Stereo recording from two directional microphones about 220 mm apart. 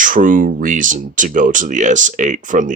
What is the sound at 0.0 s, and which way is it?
Speech, 35° right (ahead or behind).